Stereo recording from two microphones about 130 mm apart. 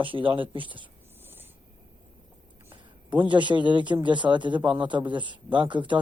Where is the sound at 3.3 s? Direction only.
35° right (ahead or behind).